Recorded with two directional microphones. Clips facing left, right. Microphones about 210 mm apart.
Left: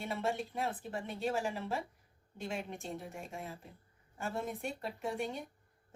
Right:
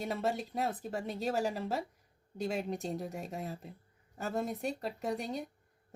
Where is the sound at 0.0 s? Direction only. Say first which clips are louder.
Right 2 dB; 40° right (ahead or behind).